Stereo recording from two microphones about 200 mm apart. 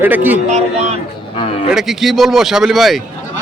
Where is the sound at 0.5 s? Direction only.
35° right (ahead or behind).